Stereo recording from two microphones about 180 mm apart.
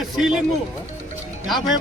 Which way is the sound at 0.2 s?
5° right (ahead or behind).